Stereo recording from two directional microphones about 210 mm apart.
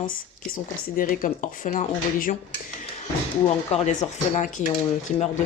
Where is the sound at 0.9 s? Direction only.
40° left (ahead or behind).